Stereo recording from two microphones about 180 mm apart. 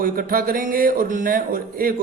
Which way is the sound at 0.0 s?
50° right (ahead or behind).